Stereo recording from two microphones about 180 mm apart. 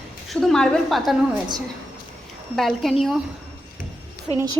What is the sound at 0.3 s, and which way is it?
Speech, centre (ahead or behind).